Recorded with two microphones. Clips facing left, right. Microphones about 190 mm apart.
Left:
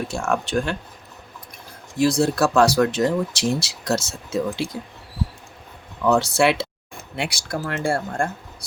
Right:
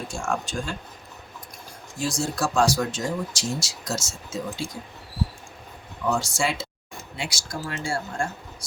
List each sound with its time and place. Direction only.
0.1 s speech: 60° left (ahead or behind)
2.0 s speech: 60° left (ahead or behind)
6.1 s speech: 60° left (ahead or behind)